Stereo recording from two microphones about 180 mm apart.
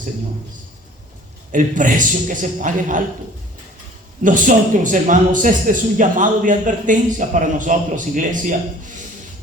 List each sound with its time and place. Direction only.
1.5 s a man's voice: 45° right (ahead or behind)
4.2 s a man's voice: 45° right (ahead or behind)